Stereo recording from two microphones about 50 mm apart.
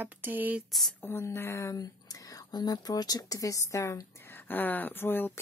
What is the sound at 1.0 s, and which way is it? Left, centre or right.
Speech, left.